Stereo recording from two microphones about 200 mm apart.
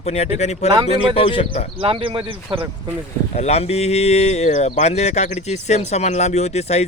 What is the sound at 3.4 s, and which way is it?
Speech, 30° left (ahead or behind).